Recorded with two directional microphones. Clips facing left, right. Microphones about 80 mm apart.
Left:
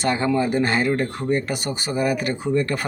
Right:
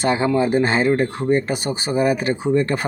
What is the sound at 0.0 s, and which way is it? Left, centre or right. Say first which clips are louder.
Speech: right 3 dB; centre.